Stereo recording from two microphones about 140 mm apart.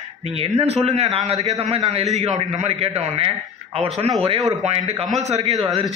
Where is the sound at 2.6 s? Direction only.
50° right (ahead or behind).